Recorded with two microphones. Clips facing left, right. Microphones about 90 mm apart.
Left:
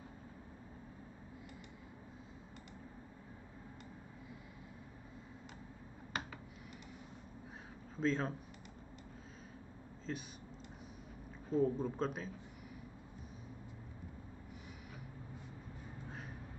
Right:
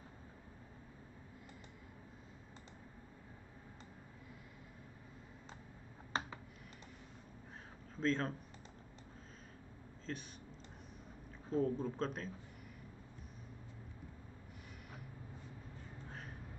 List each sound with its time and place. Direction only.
6.1 s computer keyboard: 30° right (ahead or behind)
7.9 s speech: 5° left (ahead or behind)
10.1 s speech: 5° left (ahead or behind)
11.5 s speech: 5° left (ahead or behind)
16.1 s gasp: centre (ahead or behind)